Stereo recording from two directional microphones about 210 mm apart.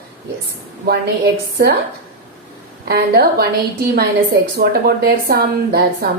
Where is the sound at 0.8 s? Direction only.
50° right (ahead or behind).